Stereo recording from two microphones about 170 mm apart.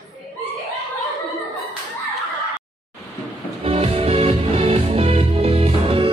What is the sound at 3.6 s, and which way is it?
Music, 35° right (ahead or behind).